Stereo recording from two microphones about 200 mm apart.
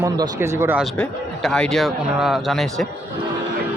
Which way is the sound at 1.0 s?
5° left (ahead or behind).